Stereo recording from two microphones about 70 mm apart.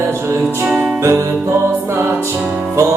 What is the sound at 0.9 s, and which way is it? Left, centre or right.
Music, right.